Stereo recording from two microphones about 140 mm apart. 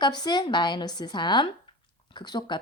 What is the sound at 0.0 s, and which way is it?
Speech, 30° left (ahead or behind).